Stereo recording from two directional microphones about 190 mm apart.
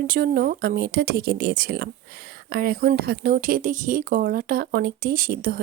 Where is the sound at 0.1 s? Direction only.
50° right (ahead or behind).